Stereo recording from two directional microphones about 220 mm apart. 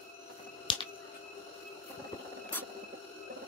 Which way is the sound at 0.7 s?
20° left (ahead or behind).